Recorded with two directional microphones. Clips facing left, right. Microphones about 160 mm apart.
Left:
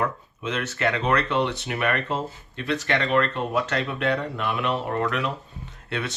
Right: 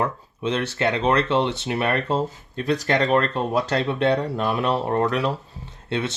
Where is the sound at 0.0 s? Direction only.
30° right (ahead or behind).